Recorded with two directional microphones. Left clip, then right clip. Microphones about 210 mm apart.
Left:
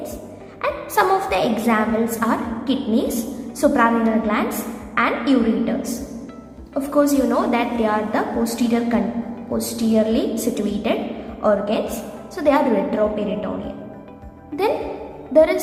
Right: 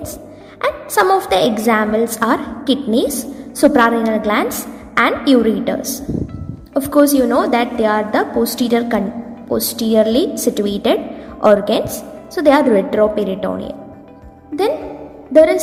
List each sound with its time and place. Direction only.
0.6 s a woman's voice: 25° right (ahead or behind)
6.7 s a woman's voice: 30° right (ahead or behind)
14.5 s speech: centre (ahead or behind)
15.3 s a woman's voice: 25° right (ahead or behind)